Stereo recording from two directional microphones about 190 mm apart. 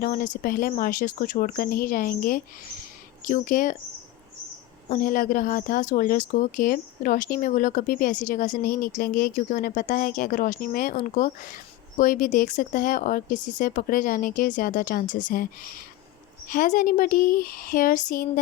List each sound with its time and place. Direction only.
0.0 s speech: 45° left (ahead or behind)
4.9 s speech: 45° left (ahead or behind)